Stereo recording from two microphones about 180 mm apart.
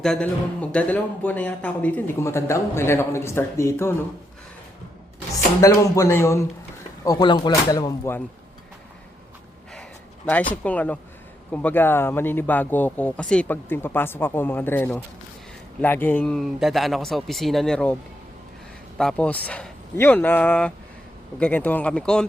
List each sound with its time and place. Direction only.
0.0 s speech: 5° left (ahead or behind)
5.5 s speech: 15° left (ahead or behind)
10.5 s speech: 5° left (ahead or behind)
18.9 s speech: 5° left (ahead or behind)